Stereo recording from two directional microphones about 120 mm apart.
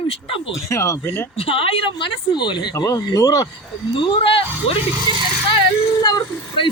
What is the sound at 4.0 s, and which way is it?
Speech, 50° left (ahead or behind).